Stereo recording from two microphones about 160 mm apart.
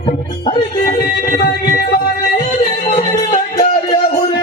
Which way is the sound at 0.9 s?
55° left (ahead or behind).